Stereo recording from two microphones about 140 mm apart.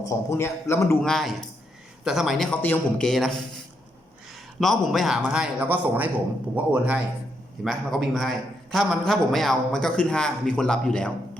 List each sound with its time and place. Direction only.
0.0 s a man's voice: 20° left (ahead or behind)
1.0 s a man's voice: centre (ahead or behind)
2.6 s a man's voice: 15° left (ahead or behind)
3.1 s a man's voice: centre (ahead or behind)
4.6 s a man's voice: centre (ahead or behind)